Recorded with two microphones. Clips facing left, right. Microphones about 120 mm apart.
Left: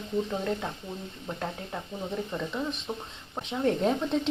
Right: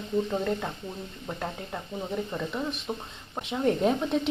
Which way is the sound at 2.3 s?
5° right (ahead or behind).